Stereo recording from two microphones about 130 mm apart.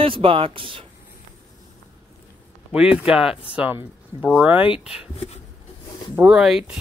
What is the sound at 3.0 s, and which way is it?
Speech, 5° right (ahead or behind).